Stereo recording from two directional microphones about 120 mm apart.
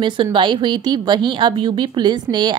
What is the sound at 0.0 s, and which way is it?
A woman's voice, 45° right (ahead or behind).